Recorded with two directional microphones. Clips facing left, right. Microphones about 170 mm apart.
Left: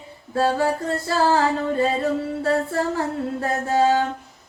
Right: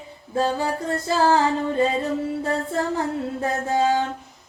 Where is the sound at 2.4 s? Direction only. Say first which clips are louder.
Left 3 dB; 20° right (ahead or behind).